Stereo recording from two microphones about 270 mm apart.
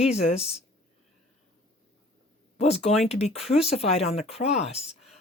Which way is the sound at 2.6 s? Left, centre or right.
Left.